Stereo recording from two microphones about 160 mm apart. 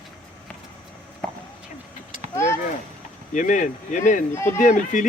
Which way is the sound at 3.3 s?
50° left (ahead or behind).